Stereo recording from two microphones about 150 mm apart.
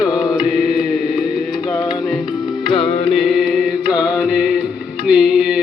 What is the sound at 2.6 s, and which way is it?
Music, 40° left (ahead or behind).